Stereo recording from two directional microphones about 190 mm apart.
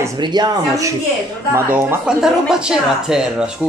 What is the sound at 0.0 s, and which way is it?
A woman's voice, 20° right (ahead or behind).